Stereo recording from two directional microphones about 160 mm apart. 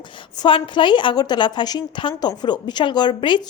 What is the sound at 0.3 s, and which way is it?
A woman's voice, 30° left (ahead or behind).